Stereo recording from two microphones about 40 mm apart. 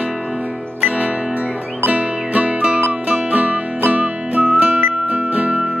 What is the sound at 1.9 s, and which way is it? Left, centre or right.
Music, right.